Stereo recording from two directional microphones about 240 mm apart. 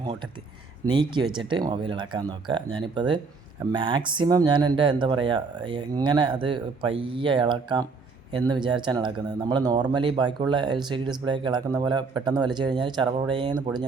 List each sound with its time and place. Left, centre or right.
0.0 s speech: centre